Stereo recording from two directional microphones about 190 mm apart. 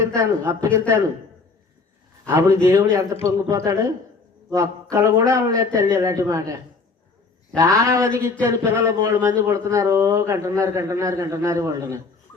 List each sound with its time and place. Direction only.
0.0 s a man's voice: 15° right (ahead or behind)
2.2 s a man's voice: 15° right (ahead or behind)